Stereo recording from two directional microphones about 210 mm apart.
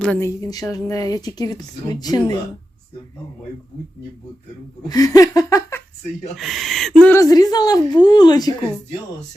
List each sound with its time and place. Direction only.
0.0 s a woman's voice: 10° left (ahead or behind)
4.9 s laughter: 15° left (ahead or behind)
6.3 s speech: centre (ahead or behind)
7.0 s a woman's voice: 15° left (ahead or behind)